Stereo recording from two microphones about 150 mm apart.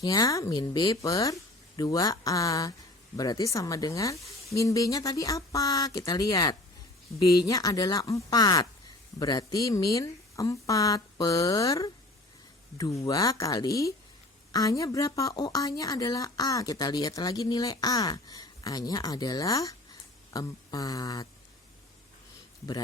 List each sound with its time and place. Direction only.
0.0 s a woman's voice: 25° left (ahead or behind)